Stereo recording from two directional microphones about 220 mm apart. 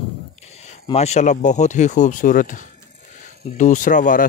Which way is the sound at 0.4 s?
30° left (ahead or behind).